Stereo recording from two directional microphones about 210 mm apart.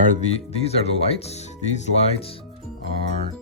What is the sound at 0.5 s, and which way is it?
Speech, 30° left (ahead or behind).